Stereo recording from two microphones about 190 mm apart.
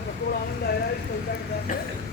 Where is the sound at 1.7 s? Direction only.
45° left (ahead or behind).